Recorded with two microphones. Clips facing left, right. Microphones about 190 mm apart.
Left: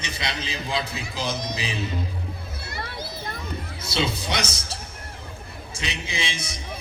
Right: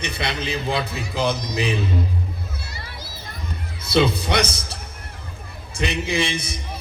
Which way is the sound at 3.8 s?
60° right (ahead or behind).